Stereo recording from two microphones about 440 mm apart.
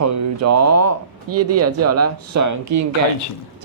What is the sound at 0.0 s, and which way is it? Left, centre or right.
Speech, right.